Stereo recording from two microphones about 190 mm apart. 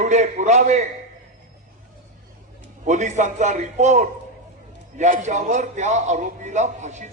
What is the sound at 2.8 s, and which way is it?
A man's voice, 40° right (ahead or behind).